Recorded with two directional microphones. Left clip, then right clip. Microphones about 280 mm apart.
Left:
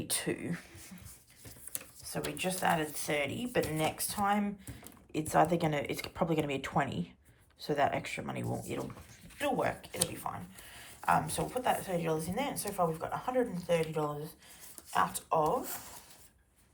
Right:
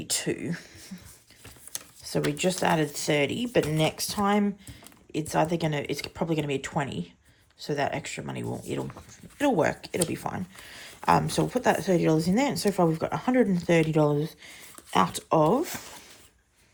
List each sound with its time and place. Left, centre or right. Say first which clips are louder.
0.0 s speech: right 6 dB; centre
2.0 s a sound: right 10 dB; centre
2.4 s speech: right 4 dB; centre